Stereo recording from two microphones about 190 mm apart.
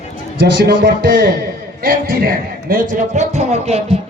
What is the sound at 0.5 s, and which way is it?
Speech, 70° right (ahead or behind).